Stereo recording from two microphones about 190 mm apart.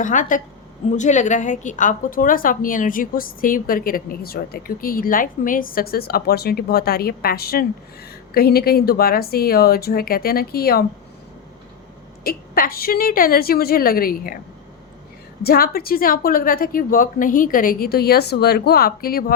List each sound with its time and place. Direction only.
0.0 s a woman's voice: 40° left (ahead or behind)
12.2 s a woman's voice: 50° left (ahead or behind)
15.4 s a woman's voice: 50° left (ahead or behind)